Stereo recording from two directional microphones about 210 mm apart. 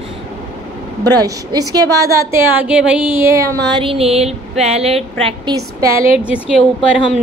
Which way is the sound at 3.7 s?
25° right (ahead or behind).